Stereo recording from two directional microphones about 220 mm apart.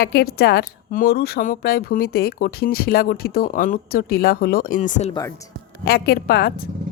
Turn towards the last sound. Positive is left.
turn(degrees=45)  # may be behind; listen again after turning